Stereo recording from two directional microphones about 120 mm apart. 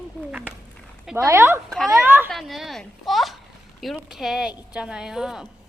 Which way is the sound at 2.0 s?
20° right (ahead or behind).